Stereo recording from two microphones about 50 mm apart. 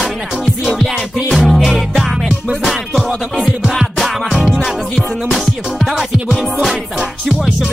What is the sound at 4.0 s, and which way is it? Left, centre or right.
Music, centre.